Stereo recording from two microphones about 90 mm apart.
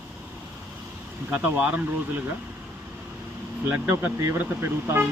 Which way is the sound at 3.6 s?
20° right (ahead or behind).